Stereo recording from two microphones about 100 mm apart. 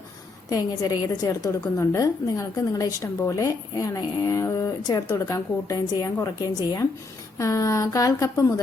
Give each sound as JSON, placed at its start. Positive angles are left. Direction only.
{"t": 0.5, "sound": "a woman's voice", "side_deg": 40}